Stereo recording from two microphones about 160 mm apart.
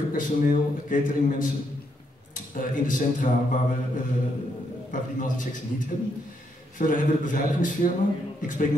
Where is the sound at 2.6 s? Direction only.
55° left (ahead or behind).